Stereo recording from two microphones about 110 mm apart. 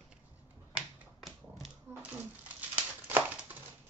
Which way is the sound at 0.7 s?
Centre (ahead or behind).